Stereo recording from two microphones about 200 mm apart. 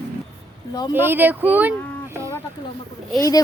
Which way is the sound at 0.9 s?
10° right (ahead or behind).